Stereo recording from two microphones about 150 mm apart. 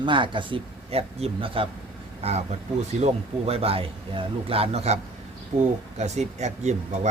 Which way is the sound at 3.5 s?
40° right (ahead or behind).